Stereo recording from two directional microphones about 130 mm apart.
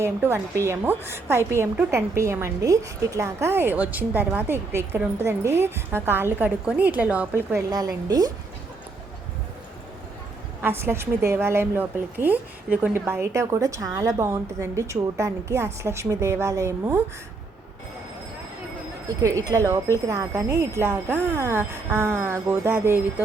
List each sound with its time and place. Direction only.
0.0 s a woman's voice: 20° right (ahead or behind)
7.7 s a woman's voice: 30° right (ahead or behind)
10.6 s a woman's voice: 15° right (ahead or behind)
19.2 s a woman's voice: 25° right (ahead or behind)